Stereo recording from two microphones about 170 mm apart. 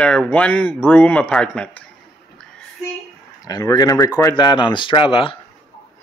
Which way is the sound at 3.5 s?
20° left (ahead or behind).